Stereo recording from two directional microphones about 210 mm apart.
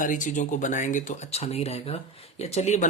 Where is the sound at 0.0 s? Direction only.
40° left (ahead or behind).